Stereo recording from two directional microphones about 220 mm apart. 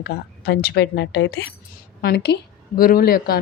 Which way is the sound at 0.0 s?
50° left (ahead or behind).